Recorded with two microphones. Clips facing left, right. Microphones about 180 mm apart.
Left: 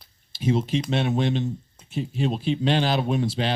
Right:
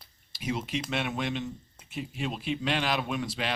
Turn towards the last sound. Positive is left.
turn(degrees=30)  # may be behind; listen again after turning